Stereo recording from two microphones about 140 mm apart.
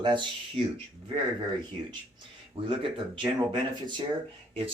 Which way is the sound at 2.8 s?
40° right (ahead or behind).